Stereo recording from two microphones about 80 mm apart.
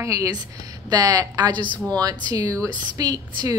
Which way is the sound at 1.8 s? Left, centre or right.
Right.